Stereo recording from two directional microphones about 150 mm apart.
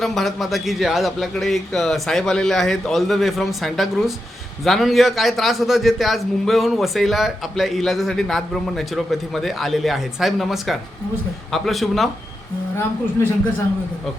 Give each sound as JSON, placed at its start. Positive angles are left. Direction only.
{"t": 0.0, "sound": "a man's voice", "side_deg": 0}
{"t": 13.2, "sound": "speech", "side_deg": 20}